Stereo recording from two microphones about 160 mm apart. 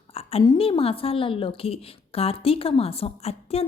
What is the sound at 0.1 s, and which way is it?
A woman's voice, 40° left (ahead or behind).